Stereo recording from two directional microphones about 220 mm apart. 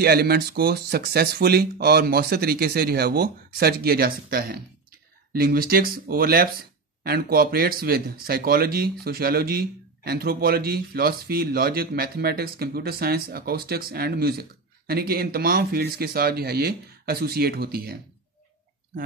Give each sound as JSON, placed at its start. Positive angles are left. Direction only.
{"t": 0.0, "sound": "speech", "side_deg": -45}